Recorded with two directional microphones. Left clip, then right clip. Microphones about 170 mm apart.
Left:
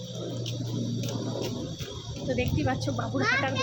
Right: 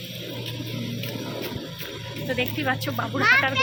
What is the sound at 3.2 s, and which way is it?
Speech, 20° left (ahead or behind).